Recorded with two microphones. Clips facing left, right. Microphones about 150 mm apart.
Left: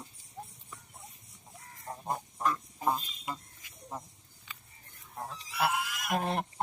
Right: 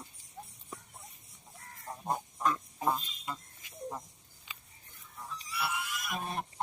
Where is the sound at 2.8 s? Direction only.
5° left (ahead or behind).